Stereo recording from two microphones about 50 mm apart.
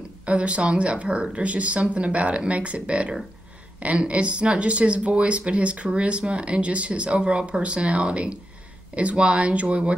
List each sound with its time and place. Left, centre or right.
0.2 s speech: right